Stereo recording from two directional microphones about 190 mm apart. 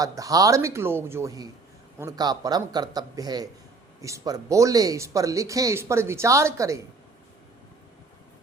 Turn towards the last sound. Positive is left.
turn(degrees=-15)  # may be behind; listen again after turning